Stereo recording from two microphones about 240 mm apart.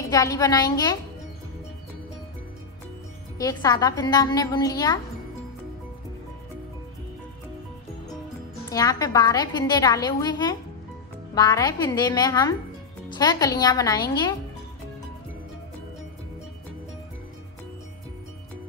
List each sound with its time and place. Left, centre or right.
0.1 s a woman's voice: centre
3.3 s a woman's voice: centre
8.6 s a woman's voice: centre